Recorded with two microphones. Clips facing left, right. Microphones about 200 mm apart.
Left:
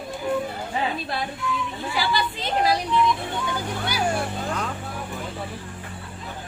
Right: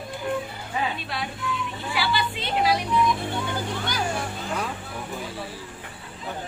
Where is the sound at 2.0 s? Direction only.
40° left (ahead or behind).